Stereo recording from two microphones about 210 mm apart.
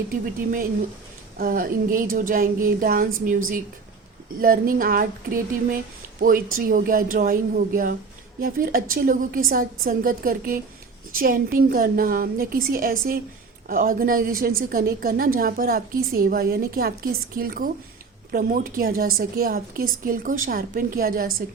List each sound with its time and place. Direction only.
0.1 s speech: 40° right (ahead or behind)
4.4 s a woman's voice: 40° right (ahead or behind)